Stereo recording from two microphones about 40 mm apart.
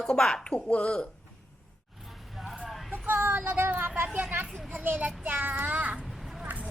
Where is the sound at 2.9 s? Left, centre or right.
Right.